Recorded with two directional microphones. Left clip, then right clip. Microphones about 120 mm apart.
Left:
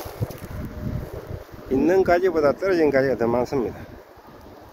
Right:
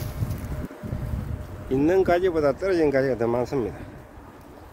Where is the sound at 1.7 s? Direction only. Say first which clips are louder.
Left 2 dB; centre (ahead or behind).